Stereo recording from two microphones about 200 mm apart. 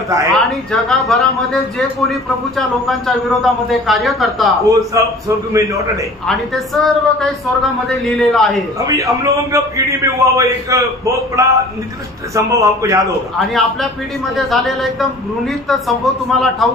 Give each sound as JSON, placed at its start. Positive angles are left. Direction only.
{"t": 0.3, "sound": "a man's voice", "side_deg": 0}
{"t": 4.6, "sound": "a man's voice", "side_deg": -15}
{"t": 6.2, "sound": "a man's voice", "side_deg": 0}
{"t": 8.7, "sound": "a man's voice", "side_deg": -15}
{"t": 13.5, "sound": "a man's voice", "side_deg": 0}